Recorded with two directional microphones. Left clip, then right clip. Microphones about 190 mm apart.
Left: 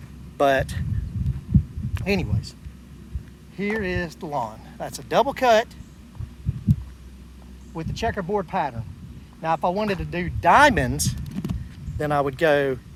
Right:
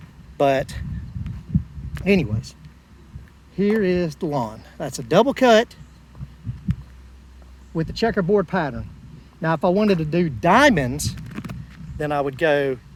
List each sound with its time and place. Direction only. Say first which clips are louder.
0.3 s speech: right 1 dB; 15° right (ahead or behind)
2.0 s speech: right 5 dB; 30° right (ahead or behind)
3.6 s speech: right 6 dB; 40° right (ahead or behind)
7.8 s speech: right 5 dB; 40° right (ahead or behind)
10.8 s speech: even; 10° right (ahead or behind)